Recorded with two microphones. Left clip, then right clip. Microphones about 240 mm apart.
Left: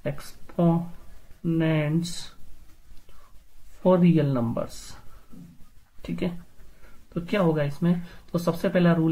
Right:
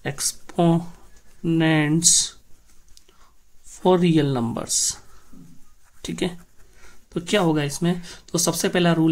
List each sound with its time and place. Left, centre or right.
0.0 s speech: right
3.8 s speech: right
6.0 s speech: right